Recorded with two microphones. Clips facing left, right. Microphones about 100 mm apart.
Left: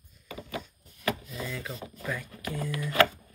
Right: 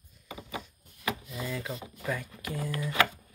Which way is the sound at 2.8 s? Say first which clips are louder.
Left 4 dB; 10° right (ahead or behind).